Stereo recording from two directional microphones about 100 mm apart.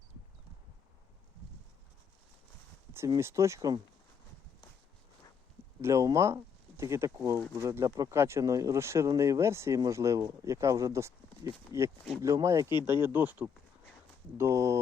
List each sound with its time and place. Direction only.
3.2 s speech: 30° right (ahead or behind)
5.8 s speech: 35° right (ahead or behind)